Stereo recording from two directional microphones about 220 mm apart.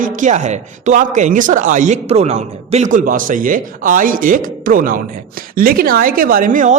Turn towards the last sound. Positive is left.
turn(degrees=-35)  # may be behind; listen again after turning